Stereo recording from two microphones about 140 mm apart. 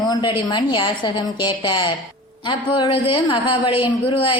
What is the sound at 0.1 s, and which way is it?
A woman's voice, 30° left (ahead or behind).